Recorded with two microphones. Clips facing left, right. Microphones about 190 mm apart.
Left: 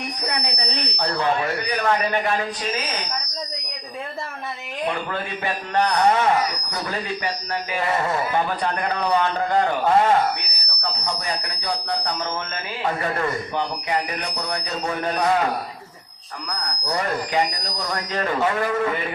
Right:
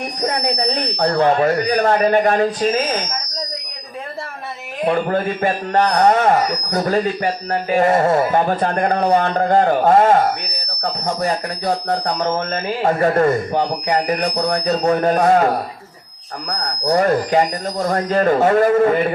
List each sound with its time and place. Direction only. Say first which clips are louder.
0.2 s speech: right 11 dB; 45° right (ahead or behind)
4.9 s speech: right 10 dB; 45° right (ahead or behind)